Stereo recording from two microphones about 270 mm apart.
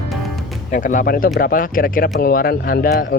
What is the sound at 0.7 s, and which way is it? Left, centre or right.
Speech, left.